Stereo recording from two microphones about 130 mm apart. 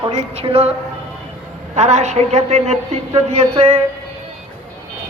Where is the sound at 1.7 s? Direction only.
60° right (ahead or behind).